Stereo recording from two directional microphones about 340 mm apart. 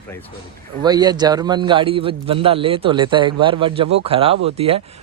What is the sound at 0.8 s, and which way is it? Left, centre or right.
A man's voice, centre.